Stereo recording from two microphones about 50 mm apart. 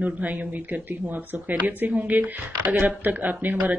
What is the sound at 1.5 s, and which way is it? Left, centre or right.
Speech, right.